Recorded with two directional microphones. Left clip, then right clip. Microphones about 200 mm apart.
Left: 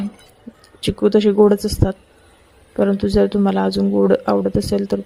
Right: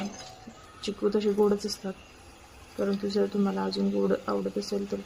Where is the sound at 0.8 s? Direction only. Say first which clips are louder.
Left 12 dB; 40° left (ahead or behind).